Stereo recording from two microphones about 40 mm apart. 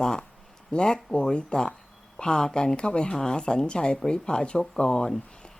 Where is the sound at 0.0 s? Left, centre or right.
Centre.